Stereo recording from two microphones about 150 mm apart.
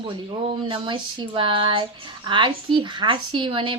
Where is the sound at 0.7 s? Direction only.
30° right (ahead or behind).